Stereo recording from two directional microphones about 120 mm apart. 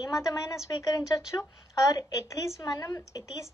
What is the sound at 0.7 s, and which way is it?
A woman's voice, 30° left (ahead or behind).